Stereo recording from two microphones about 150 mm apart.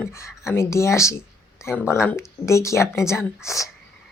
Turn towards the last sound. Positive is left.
turn(degrees=20)  # may be behind; listen again after turning